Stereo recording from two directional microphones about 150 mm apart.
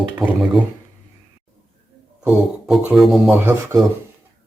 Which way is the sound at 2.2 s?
5° right (ahead or behind).